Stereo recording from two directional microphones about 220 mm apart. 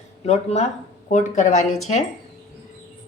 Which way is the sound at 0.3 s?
30° left (ahead or behind).